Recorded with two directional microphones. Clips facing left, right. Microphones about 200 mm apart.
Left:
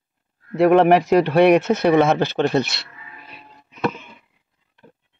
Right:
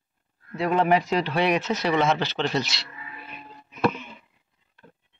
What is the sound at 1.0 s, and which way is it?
Speech, 55° left (ahead or behind).